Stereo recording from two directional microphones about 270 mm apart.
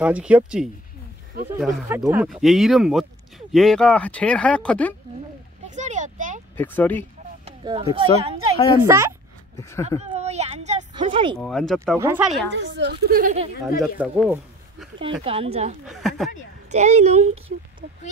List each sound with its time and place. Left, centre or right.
0.0 s speech: centre
5.8 s a sound: right
6.5 s speech: centre
7.4 s speech: centre
9.6 s speech: centre
9.8 s speech: right
11.3 s speech: centre
12.4 s a woman's voice: right
13.9 s speech: centre
15.2 s speech: right
15.9 s speech: centre
16.7 s speech: right